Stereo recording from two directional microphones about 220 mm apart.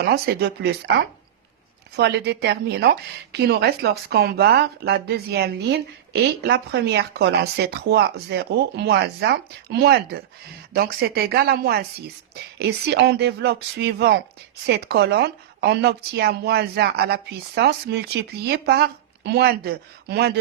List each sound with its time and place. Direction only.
0.0 s a woman's voice: 45° right (ahead or behind)
2.0 s a woman's voice: 50° right (ahead or behind)